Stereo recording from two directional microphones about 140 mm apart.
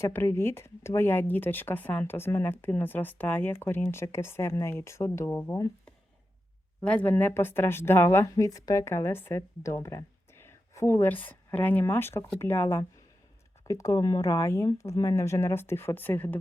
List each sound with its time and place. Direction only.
0.0 s speech: 20° left (ahead or behind)
6.8 s speech: 10° left (ahead or behind)